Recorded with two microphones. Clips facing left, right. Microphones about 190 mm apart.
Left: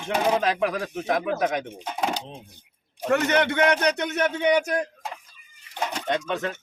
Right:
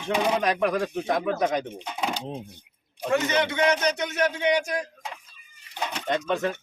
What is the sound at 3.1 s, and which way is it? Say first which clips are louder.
A man's voice: left 2 dB; 60° left (ahead or behind).